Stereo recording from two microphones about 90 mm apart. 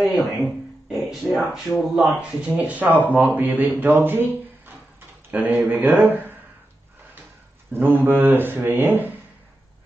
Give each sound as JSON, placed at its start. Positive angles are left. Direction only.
{"t": 0.0, "sound": "a sound", "side_deg": 0}
{"t": 1.1, "sound": "speech", "side_deg": 0}
{"t": 2.4, "sound": "a man's voice", "side_deg": -15}
{"t": 7.7, "sound": "a man's voice", "side_deg": -20}